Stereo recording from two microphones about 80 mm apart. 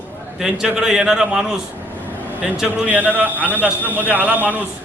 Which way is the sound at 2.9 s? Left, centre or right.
Right.